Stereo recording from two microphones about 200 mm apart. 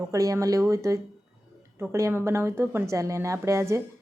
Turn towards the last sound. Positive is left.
turn(degrees=-15)  # may be behind; listen again after turning